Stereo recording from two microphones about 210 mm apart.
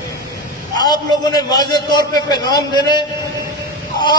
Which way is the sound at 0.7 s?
20° left (ahead or behind).